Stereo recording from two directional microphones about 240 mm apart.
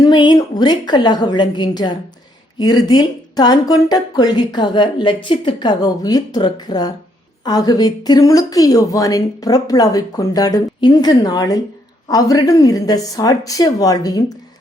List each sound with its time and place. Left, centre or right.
0.0 s speech: centre